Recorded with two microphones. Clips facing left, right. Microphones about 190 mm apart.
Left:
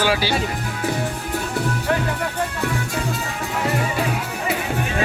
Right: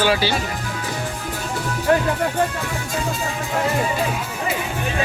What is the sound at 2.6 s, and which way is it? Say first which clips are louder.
Speech: left 2 dB; 65° left (ahead or behind).